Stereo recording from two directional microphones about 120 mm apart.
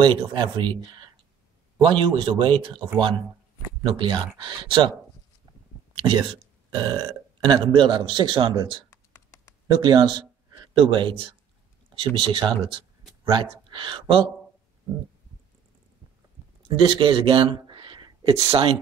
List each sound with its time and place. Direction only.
0.0 s speech: 45° right (ahead or behind)
3.9 s speech: 45° right (ahead or behind)
5.9 s speech: 45° right (ahead or behind)
8.9 s computer keyboard: 25° left (ahead or behind)
9.7 s a man's voice: 35° right (ahead or behind)
16.6 s a sound: 45° right (ahead or behind)
18.3 s speech: 55° right (ahead or behind)